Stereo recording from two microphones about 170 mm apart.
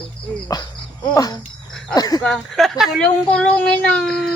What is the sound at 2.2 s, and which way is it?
Speech, centre (ahead or behind).